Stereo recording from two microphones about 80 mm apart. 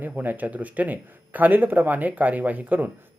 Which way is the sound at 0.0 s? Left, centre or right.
Right.